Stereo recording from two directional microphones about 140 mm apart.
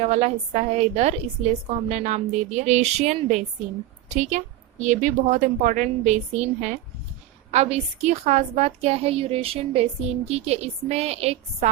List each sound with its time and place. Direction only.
0.0 s a woman's voice: 50° right (ahead or behind)